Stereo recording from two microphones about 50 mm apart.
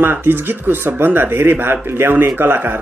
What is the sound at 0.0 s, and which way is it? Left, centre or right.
Speech, right.